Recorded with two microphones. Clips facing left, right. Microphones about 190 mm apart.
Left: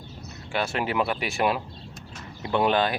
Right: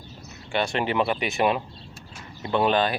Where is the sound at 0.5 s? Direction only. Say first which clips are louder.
Right 2 dB; 5° left (ahead or behind).